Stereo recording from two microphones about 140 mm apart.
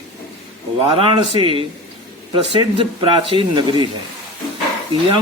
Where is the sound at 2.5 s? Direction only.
40° right (ahead or behind).